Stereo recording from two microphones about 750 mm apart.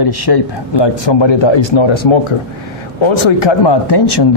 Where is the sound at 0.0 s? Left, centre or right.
Left.